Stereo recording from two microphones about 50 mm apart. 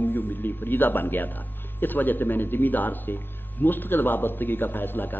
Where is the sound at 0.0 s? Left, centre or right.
Left.